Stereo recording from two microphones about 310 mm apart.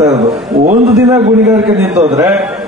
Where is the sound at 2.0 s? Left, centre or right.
Centre.